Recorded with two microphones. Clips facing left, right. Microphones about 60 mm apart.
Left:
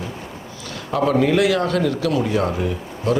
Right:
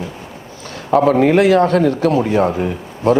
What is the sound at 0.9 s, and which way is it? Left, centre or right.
Speech, right.